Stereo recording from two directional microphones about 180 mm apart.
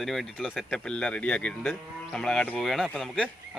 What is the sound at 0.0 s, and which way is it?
Speech, centre (ahead or behind).